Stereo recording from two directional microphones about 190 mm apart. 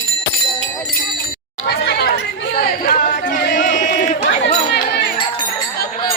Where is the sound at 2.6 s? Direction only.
45° left (ahead or behind).